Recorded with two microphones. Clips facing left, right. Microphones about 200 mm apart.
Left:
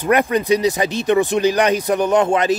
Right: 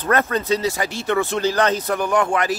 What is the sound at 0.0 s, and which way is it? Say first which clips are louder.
Speech: left 4 dB; 15° left (ahead or behind).